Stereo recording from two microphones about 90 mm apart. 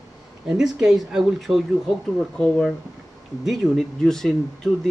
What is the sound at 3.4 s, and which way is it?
Speech, centre (ahead or behind).